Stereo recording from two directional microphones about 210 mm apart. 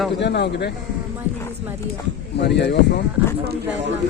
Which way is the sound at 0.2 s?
55° left (ahead or behind).